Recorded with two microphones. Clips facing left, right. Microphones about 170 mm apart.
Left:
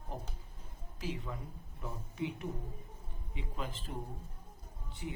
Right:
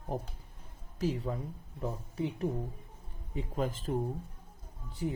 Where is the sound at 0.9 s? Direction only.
40° right (ahead or behind).